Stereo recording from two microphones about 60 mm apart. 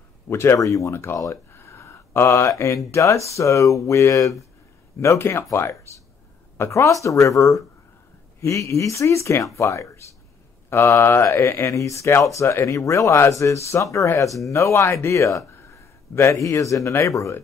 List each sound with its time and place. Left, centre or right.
0.3 s mantra: left
0.6 s speech: left
0.9 s mantra: left
1.3 s speech: left
5.2 s mantra: left
6.7 s speech: left
11.0 s mantra: left
11.6 s speech: left
15.5 s a sound: left
17.0 s speech: left